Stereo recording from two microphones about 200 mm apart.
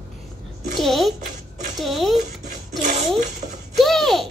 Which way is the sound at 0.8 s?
Centre (ahead or behind).